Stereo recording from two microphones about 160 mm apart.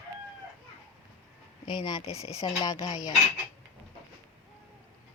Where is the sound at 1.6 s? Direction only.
25° left (ahead or behind).